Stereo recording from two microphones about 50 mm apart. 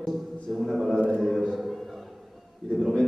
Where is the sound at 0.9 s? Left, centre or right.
Centre.